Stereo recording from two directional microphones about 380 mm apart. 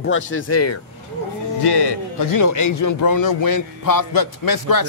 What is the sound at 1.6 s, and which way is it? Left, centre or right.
Speech, left.